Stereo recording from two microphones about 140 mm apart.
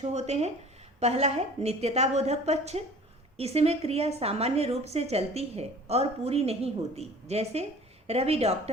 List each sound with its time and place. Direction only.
0.0 s a woman's voice: 50° right (ahead or behind)